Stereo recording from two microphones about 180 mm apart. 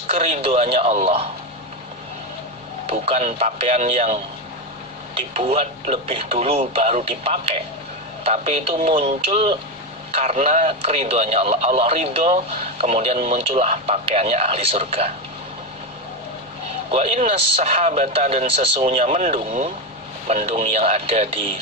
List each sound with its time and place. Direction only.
0.1 s a man's voice: 35° right (ahead or behind)
2.8 s a man's voice: 35° right (ahead or behind)
5.3 s a man's voice: 35° right (ahead or behind)
16.9 s a man's voice: 35° right (ahead or behind)